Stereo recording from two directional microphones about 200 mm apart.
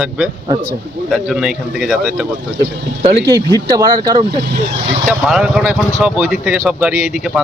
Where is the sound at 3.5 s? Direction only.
20° right (ahead or behind).